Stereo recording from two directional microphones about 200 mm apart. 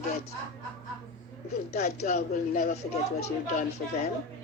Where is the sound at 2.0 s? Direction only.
35° left (ahead or behind).